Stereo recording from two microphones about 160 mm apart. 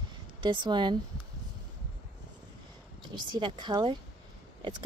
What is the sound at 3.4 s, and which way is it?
Speech, 30° right (ahead or behind).